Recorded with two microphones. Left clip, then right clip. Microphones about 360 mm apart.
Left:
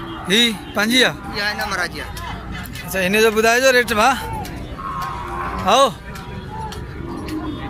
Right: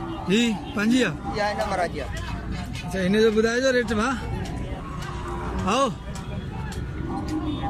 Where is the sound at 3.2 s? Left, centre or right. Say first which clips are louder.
Left 6 dB; centre.